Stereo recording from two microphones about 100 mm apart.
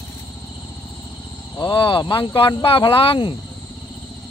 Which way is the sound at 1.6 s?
55° left (ahead or behind).